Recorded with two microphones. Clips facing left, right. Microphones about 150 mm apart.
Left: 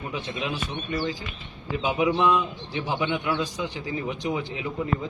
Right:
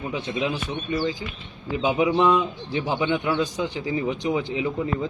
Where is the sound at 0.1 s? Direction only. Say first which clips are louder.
Right 5 dB; 20° right (ahead or behind).